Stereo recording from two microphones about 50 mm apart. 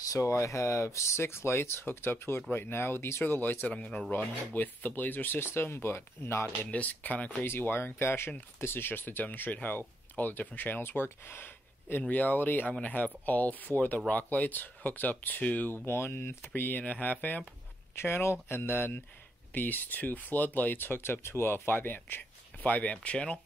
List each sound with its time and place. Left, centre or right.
0.1 s speech: left
3.7 s speech: left
4.1 s speech: left
5.4 s speech: left
6.4 s speech: left
7.7 s speech: left
12.0 s speech: left
15.7 s speech: left
16.8 s speech: left
17.9 s speech: left
19.5 s speech: left